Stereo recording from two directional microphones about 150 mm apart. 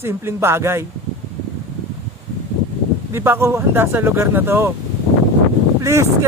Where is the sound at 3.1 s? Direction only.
15° right (ahead or behind).